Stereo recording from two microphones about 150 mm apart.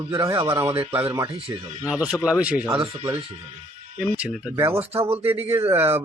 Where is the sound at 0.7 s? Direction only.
40° right (ahead or behind).